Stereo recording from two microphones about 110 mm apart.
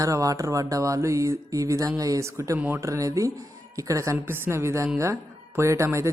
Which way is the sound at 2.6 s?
15° right (ahead or behind).